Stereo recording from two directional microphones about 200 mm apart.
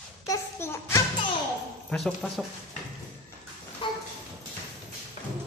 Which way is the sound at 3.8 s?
25° left (ahead or behind).